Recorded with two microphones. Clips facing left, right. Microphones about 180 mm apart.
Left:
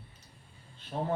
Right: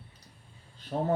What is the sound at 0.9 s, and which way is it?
Speech, 40° right (ahead or behind).